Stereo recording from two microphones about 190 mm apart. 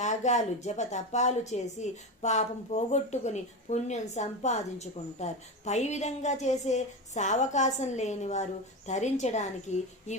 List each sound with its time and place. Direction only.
0.0 s a woman's voice: 40° left (ahead or behind)